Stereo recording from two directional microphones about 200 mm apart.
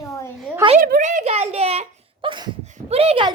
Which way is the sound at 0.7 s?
45° right (ahead or behind).